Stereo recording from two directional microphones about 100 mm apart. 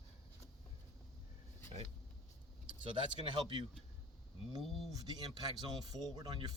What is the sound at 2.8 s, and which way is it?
Speech, 55° right (ahead or behind).